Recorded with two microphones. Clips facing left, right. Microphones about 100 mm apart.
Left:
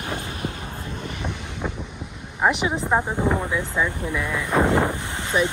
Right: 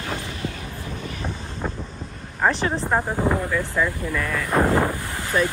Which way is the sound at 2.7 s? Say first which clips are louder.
Even; centre (ahead or behind).